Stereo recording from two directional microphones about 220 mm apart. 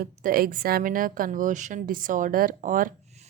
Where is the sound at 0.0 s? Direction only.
40° right (ahead or behind).